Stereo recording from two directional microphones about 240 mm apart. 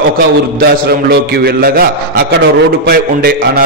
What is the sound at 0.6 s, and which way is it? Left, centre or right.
A man's voice, right.